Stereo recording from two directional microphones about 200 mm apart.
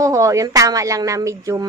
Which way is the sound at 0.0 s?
15° right (ahead or behind).